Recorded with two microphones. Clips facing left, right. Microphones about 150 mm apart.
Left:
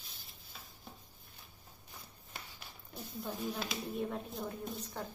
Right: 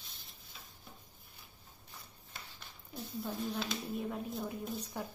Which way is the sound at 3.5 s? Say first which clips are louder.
Right 1 dB; centre (ahead or behind).